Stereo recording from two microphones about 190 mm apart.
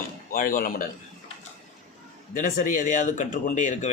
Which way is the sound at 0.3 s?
50° left (ahead or behind).